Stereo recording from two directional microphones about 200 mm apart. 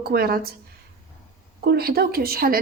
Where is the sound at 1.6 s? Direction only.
50° right (ahead or behind).